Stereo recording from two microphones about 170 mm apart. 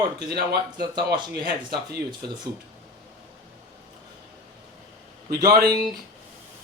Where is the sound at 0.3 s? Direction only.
65° right (ahead or behind).